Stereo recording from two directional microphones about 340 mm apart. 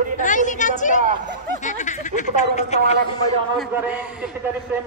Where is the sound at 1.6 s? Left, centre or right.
Left.